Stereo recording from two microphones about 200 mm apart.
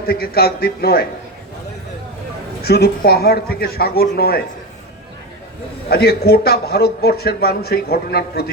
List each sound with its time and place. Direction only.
0.0 s a man's voice: 50° left (ahead or behind)
2.6 s a man's voice: 55° left (ahead or behind)
5.9 s a man's voice: 50° left (ahead or behind)